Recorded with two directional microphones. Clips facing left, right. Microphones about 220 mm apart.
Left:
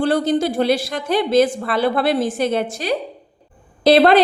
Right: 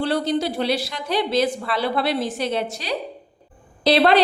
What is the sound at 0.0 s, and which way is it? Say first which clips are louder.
A woman's voice: left 4 dB; 50° left (ahead or behind).